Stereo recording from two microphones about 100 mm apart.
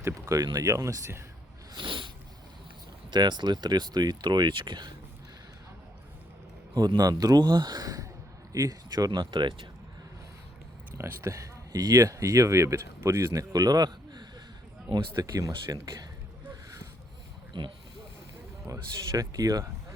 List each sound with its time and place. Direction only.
0.0 s speech: 35° right (ahead or behind)
1.7 s a sound: 55° right (ahead or behind)
3.1 s speech: 50° right (ahead or behind)
6.7 s speech: 40° right (ahead or behind)
10.9 s speech: 25° right (ahead or behind)
17.5 s speech: 50° right (ahead or behind)
18.7 s speech: 35° right (ahead or behind)